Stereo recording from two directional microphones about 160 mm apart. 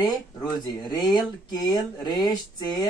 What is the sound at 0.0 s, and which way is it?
Speech, 25° left (ahead or behind).